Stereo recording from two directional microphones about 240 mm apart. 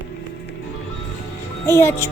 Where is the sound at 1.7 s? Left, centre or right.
Centre.